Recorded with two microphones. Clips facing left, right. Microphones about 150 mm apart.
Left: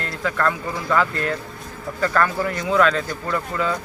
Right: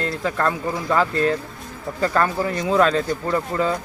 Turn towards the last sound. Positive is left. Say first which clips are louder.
# right 2 dB
turn(degrees=-30)  # may be behind; listen again after turning